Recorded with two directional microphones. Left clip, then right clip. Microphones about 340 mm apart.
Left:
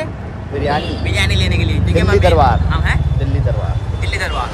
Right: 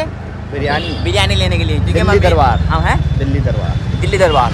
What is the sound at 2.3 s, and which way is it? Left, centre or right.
Speech, right.